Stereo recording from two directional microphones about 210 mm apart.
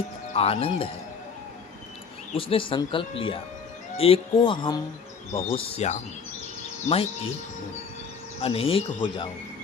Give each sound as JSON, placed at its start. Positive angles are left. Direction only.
{"t": 0.3, "sound": "speech", "side_deg": 30}
{"t": 2.3, "sound": "speech", "side_deg": 25}
{"t": 8.4, "sound": "speech", "side_deg": 30}